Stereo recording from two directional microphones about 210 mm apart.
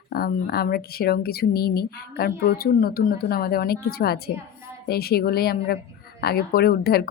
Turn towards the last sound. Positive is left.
turn(degrees=45)  # may be behind; listen again after turning